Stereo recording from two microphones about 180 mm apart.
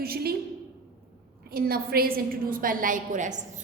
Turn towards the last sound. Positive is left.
turn(degrees=-45)  # may be behind; listen again after turning